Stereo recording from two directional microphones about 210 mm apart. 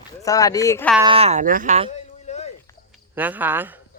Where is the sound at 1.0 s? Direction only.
25° right (ahead or behind).